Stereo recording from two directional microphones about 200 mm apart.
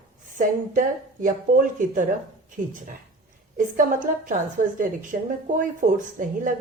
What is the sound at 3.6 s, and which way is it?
A woman's voice, 40° right (ahead or behind).